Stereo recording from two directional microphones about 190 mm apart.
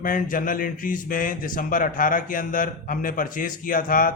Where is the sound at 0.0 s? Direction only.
45° left (ahead or behind).